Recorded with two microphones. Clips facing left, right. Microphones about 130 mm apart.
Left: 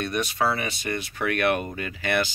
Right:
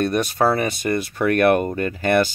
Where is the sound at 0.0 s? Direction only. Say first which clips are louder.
Right 6 dB; 45° right (ahead or behind).